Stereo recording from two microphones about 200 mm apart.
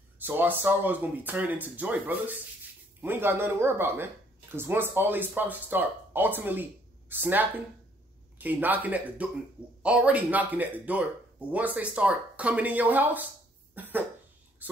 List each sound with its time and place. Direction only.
0.2 s speech: 10° right (ahead or behind)
13.7 s cough: 10° right (ahead or behind)
14.6 s a sound: 10° right (ahead or behind)